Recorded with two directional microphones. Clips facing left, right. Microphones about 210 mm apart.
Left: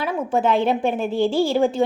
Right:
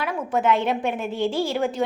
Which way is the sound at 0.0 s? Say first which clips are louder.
Left 2 dB; 30° left (ahead or behind).